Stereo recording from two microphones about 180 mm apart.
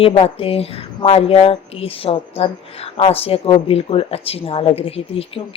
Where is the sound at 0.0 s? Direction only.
30° left (ahead or behind).